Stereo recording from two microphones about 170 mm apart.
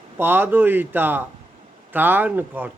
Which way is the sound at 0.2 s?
10° right (ahead or behind).